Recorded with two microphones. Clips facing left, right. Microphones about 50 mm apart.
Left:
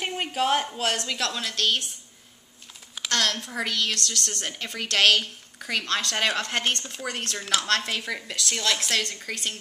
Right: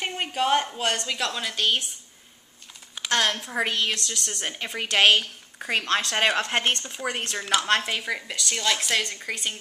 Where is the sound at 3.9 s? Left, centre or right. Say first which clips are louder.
Left 1 dB; centre.